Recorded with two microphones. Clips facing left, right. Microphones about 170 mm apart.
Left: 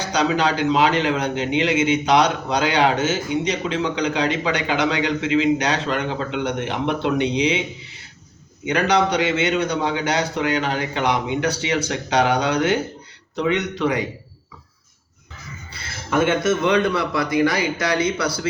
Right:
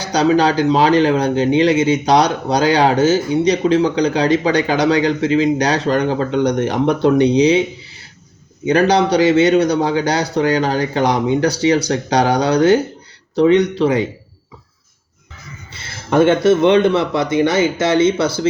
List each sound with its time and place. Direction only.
0.0 s a man's voice: 35° right (ahead or behind)
8.6 s a man's voice: 35° right (ahead or behind)
15.7 s speech: 35° right (ahead or behind)